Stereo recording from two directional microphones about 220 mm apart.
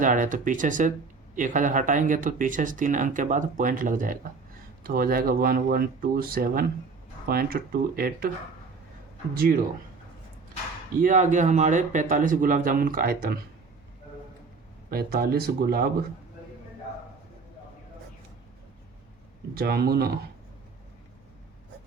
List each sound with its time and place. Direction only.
0.0 s speech: 35° right (ahead or behind)
9.3 s speech: 40° right (ahead or behind)
11.0 s speech: 35° right (ahead or behind)
14.8 s speech: 45° right (ahead or behind)
19.5 s speech: 45° right (ahead or behind)